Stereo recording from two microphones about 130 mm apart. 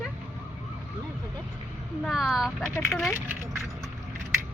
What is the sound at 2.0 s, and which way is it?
Speech, centre (ahead or behind).